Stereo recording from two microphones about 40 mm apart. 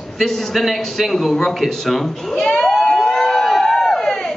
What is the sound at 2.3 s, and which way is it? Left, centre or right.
Speech, left.